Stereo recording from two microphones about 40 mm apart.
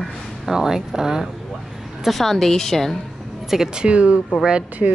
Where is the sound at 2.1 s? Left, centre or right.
Centre.